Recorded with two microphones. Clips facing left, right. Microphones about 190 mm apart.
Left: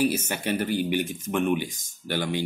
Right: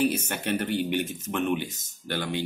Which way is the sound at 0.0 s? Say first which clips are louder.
Left 1 dB; 10° left (ahead or behind).